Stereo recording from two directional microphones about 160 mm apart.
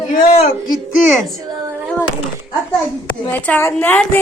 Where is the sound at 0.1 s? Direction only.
60° left (ahead or behind).